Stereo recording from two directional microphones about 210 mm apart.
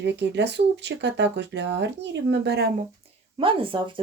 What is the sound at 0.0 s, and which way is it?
Speech, 55° right (ahead or behind).